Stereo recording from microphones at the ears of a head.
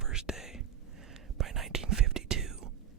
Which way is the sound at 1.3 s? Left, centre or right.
Right.